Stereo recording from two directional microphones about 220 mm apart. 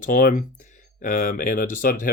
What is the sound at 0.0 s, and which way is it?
Speech, 40° left (ahead or behind).